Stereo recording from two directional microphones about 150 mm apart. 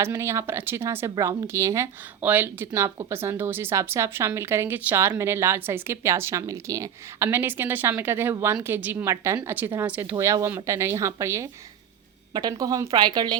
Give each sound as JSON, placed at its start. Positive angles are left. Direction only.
{"t": 0.0, "sound": "a woman's voice", "side_deg": -15}